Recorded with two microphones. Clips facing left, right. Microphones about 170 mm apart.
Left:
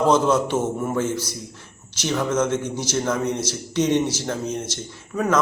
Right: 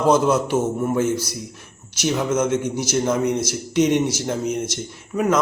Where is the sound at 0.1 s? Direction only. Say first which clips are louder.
Right 1 dB; 10° right (ahead or behind).